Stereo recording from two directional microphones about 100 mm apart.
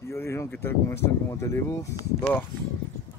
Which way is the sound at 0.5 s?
25° left (ahead or behind).